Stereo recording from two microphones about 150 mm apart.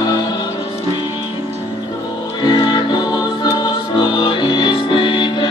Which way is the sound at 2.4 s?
30° left (ahead or behind).